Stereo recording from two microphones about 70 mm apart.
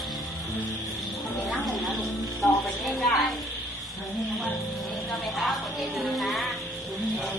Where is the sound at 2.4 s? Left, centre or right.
Centre.